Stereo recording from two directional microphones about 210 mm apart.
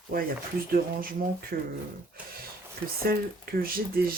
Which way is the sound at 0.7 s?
45° right (ahead or behind).